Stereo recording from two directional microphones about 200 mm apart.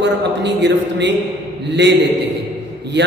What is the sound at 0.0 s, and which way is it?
Speech, 60° right (ahead or behind).